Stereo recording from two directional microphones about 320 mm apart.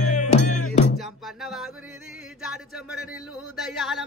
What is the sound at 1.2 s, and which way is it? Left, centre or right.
Music, centre.